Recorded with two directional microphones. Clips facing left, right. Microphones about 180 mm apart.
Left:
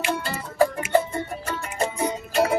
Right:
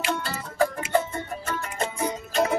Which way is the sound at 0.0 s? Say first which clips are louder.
Left 2 dB; 15° left (ahead or behind).